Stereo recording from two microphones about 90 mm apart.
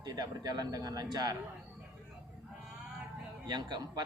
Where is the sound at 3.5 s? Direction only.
55° right (ahead or behind).